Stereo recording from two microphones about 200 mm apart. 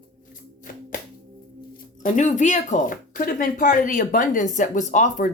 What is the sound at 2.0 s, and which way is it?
Speech, 35° left (ahead or behind).